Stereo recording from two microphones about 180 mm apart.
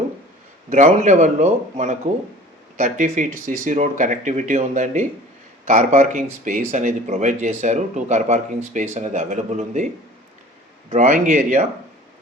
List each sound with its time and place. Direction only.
0.7 s speech: 40° right (ahead or behind)
10.9 s speech: 40° right (ahead or behind)